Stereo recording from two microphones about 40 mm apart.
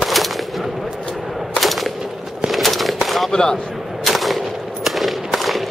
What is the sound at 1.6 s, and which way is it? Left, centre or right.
Machine gun, centre.